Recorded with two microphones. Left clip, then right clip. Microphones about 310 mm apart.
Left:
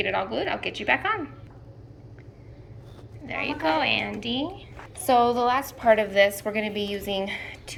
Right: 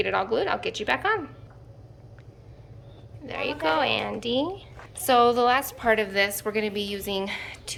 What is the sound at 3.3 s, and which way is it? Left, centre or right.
A woman's voice, centre.